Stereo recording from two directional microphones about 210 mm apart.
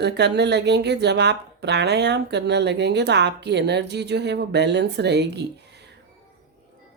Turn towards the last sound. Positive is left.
turn(degrees=-55)  # may be behind; listen again after turning